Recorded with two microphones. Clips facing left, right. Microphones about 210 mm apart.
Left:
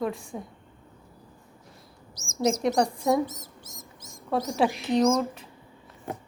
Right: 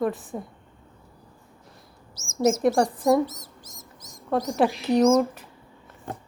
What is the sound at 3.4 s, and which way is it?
Bird, 25° left (ahead or behind).